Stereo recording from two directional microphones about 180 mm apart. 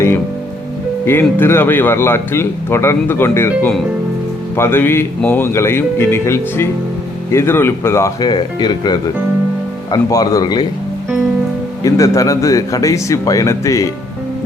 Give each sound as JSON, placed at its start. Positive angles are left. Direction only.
{"t": 1.0, "sound": "a man's voice", "side_deg": 10}
{"t": 11.8, "sound": "a man's voice", "side_deg": 20}